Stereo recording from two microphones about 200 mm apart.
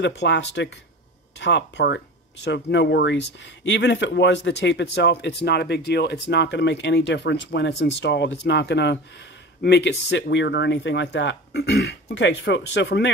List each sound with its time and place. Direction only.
0.0 s speech: 60° left (ahead or behind)